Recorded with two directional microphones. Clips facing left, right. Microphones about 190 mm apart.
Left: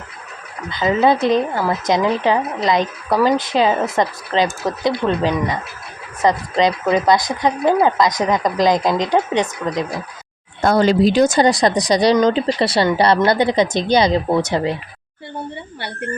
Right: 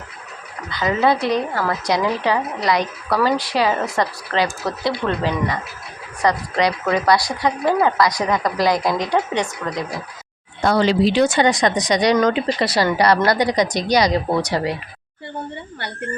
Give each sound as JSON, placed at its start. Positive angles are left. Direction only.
{"t": 0.7, "sound": "speech", "side_deg": 20}
{"t": 10.6, "sound": "speech", "side_deg": 45}